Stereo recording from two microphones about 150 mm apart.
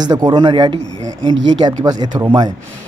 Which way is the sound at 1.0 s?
30° right (ahead or behind).